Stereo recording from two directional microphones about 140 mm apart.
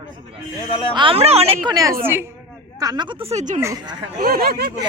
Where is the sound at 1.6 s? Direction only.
25° right (ahead or behind); by 3.4 s 45° right (ahead or behind).